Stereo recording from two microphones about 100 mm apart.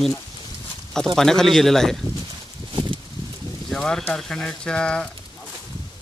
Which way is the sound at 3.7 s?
5° left (ahead or behind).